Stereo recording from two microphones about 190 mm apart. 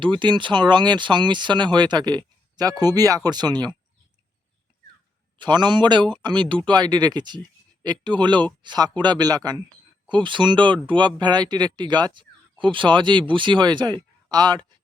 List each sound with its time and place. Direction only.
0.0 s speech: 25° right (ahead or behind)
5.4 s speech: 25° right (ahead or behind)